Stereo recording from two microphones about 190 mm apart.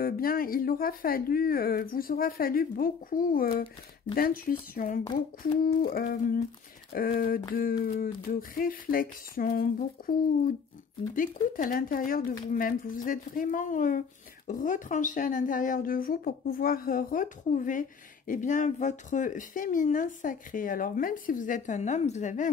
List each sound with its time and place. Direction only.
0.0 s speech: 50° left (ahead or behind)